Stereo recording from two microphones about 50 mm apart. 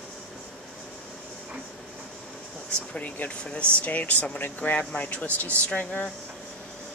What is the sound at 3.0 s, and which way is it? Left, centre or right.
Speech, left.